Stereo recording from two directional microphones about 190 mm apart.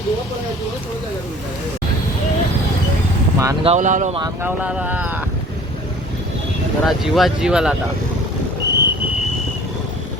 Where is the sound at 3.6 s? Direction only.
35° right (ahead or behind).